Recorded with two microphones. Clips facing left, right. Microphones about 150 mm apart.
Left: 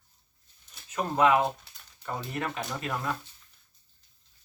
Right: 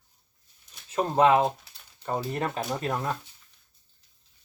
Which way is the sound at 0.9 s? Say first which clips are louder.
Right 3 dB; 30° right (ahead or behind).